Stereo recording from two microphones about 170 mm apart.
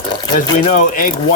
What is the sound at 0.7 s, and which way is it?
Speech, 50° left (ahead or behind).